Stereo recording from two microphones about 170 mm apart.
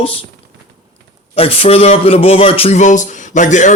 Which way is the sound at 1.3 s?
35° left (ahead or behind).